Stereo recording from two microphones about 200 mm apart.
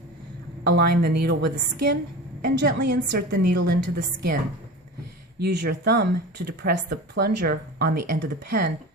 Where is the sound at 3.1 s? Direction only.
50° right (ahead or behind).